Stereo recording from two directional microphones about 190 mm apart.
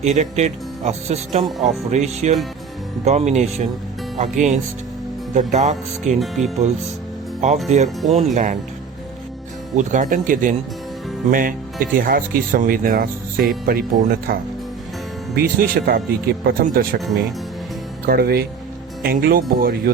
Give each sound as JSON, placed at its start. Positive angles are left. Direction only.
{"t": 0.0, "sound": "speech", "side_deg": -35}
{"t": 6.1, "sound": "speech", "side_deg": 0}
{"t": 7.7, "sound": "speech", "side_deg": -35}
{"t": 9.7, "sound": "speech", "side_deg": -40}
{"t": 15.4, "sound": "speech", "side_deg": -50}
{"t": 18.0, "sound": "speech", "side_deg": -55}